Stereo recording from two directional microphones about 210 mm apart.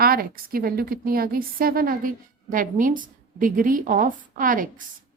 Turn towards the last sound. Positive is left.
turn(degrees=-40)  # may be behind; listen again after turning